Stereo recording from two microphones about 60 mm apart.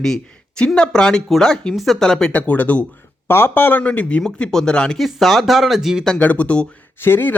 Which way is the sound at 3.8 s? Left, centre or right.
Left.